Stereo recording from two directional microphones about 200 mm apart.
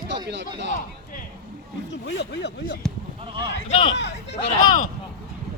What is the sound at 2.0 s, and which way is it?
Speech, 55° left (ahead or behind).